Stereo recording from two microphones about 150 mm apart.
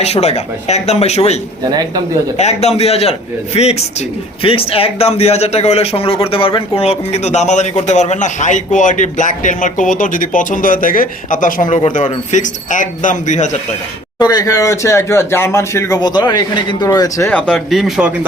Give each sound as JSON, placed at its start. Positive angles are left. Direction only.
{"t": 0.0, "sound": "speech", "side_deg": 45}
{"t": 2.4, "sound": "speech", "side_deg": 50}
{"t": 14.2, "sound": "speech", "side_deg": 25}
{"t": 17.2, "sound": "speech", "side_deg": 10}